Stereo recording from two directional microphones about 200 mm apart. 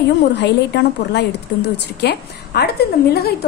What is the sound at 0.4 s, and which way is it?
A woman's voice, 60° left (ahead or behind).